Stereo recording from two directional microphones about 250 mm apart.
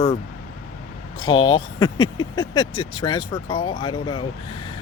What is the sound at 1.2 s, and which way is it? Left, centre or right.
Speech, centre.